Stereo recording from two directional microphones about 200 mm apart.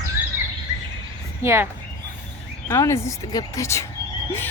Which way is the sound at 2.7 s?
15° left (ahead or behind).